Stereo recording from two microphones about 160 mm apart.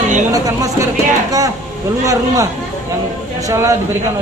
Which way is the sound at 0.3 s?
20° right (ahead or behind).